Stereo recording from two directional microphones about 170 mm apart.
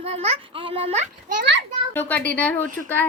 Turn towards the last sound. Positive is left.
turn(degrees=10)  # may be behind; listen again after turning